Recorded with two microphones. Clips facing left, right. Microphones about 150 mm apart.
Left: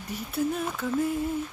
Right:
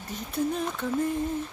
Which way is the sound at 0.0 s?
10° left (ahead or behind).